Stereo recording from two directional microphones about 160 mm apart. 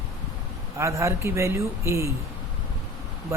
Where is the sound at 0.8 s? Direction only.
20° right (ahead or behind).